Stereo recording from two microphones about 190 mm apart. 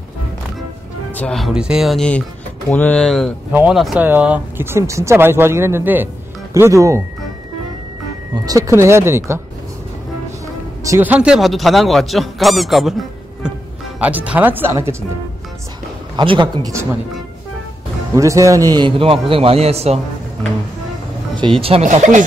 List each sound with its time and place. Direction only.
1.1 s a man's voice: 5° left (ahead or behind); by 7.0 s 15° right (ahead or behind)
8.5 s speech: 15° right (ahead or behind)
10.8 s a man's voice: 15° right (ahead or behind)
13.9 s speech: 5° right (ahead or behind)
16.2 s a man's voice: 25° right (ahead or behind)
18.1 s a man's voice: 15° right (ahead or behind); by 20.0 s 35° right (ahead or behind)
21.4 s speech: 30° right (ahead or behind)